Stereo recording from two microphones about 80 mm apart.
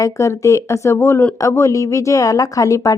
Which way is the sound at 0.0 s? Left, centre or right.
Left.